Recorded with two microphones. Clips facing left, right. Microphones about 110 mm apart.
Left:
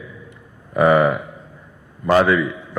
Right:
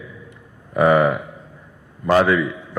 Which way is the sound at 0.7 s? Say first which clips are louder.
Left 1 dB; 25° left (ahead or behind).